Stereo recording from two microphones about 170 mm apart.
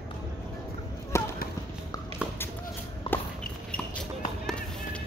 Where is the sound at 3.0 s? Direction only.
30° left (ahead or behind).